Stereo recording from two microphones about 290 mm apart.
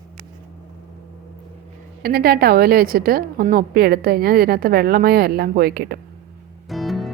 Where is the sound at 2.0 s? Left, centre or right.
Right.